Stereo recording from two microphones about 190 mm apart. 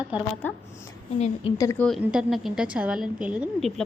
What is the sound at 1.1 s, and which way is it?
Speech, 35° left (ahead or behind).